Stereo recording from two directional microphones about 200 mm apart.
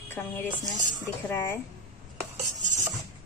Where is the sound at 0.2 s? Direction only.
10° left (ahead or behind).